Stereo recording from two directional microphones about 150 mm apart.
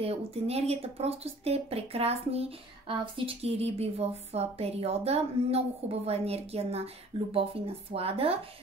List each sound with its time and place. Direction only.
0.0 s speech: 40° right (ahead or behind)